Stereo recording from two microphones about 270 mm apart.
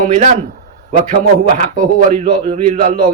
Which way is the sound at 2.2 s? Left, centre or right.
Right.